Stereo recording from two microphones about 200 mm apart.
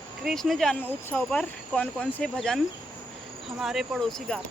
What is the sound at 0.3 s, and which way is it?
Speech, centre (ahead or behind).